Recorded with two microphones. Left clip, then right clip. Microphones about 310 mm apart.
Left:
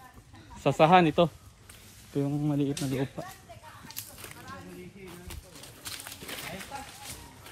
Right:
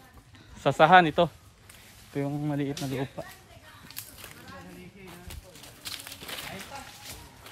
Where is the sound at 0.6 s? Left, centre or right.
Right.